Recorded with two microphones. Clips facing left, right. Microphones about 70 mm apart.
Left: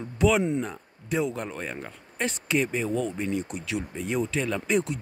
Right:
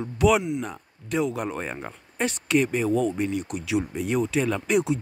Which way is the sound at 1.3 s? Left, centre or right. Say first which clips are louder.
Right 3 dB; centre.